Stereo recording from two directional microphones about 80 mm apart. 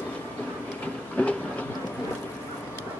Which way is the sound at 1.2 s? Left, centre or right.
Centre.